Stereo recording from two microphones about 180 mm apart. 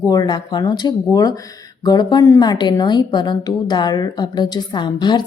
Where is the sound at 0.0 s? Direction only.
20° left (ahead or behind).